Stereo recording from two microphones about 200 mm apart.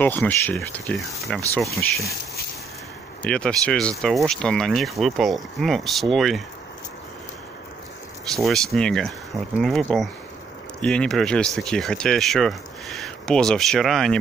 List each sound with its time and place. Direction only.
0.0 s speech: 10° left (ahead or behind)
3.2 s speech: 5° left (ahead or behind)
8.4 s speech: centre (ahead or behind)